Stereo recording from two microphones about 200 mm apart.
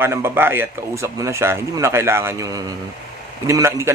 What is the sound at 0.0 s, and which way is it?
Speech, 10° right (ahead or behind).